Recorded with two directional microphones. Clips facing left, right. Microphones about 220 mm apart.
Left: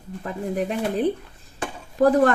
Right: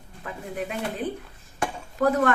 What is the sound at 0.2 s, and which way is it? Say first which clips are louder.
Speech: left 7 dB; 35° left (ahead or behind).